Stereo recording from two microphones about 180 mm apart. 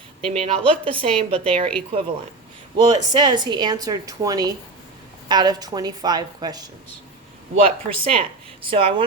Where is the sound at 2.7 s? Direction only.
25° right (ahead or behind).